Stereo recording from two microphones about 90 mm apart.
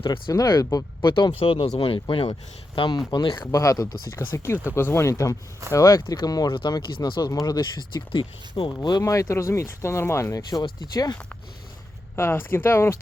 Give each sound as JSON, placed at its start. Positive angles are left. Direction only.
{"t": 0.3, "sound": "speech", "side_deg": 40}
{"t": 1.0, "sound": "speech", "side_deg": 60}
{"t": 1.4, "sound": "speech", "side_deg": 85}
{"t": 2.7, "sound": "speech", "side_deg": 65}
{"t": 4.2, "sound": "speech", "side_deg": 25}
{"t": 6.5, "sound": "speech", "side_deg": 65}
{"t": 8.9, "sound": "speech", "side_deg": 40}
{"t": 10.6, "sound": "speech", "side_deg": 50}
{"t": 12.1, "sound": "speech", "side_deg": 25}